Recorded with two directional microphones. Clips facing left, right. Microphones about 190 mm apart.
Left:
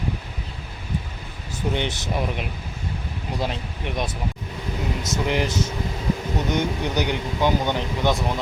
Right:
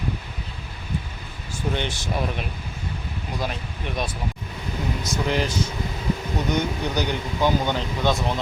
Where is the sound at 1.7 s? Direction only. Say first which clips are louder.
Left 1 dB; 20° left (ahead or behind).